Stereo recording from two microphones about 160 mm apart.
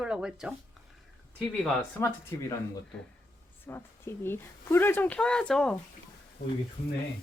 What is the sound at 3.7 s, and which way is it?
Speech, 15° left (ahead or behind).